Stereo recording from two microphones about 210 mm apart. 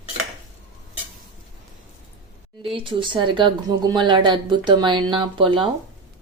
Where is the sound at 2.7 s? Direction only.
25° right (ahead or behind).